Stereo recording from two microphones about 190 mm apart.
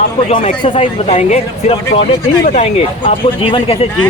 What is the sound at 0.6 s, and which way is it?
Speech, 30° left (ahead or behind).